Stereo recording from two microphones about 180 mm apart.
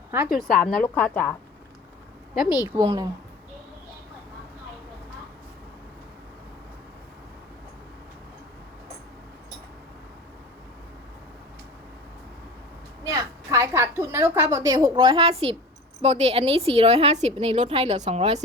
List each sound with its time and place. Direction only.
0.1 s a woman's voice: 10° right (ahead or behind)
0.5 s a woman's voice: 5° left (ahead or behind)
2.7 s a woman's voice: 25° right (ahead or behind)
13.1 s a woman's voice: 20° right (ahead or behind); by 18.4 s 35° right (ahead or behind)